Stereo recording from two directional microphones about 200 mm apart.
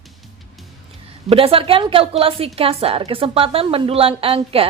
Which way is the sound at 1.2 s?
30° right (ahead or behind).